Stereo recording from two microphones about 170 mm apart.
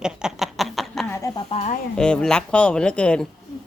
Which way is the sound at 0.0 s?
5° right (ahead or behind).